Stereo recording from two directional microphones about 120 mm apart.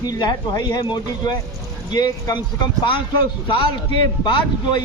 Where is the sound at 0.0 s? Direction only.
35° left (ahead or behind).